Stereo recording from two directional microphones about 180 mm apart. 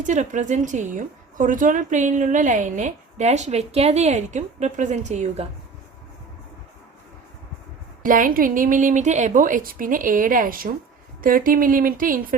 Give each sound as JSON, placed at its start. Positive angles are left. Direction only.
{"t": 0.0, "sound": "a woman's voice", "side_deg": -45}
{"t": 8.0, "sound": "a woman's voice", "side_deg": -50}